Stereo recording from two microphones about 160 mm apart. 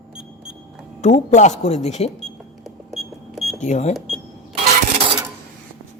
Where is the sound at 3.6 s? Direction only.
50° left (ahead or behind).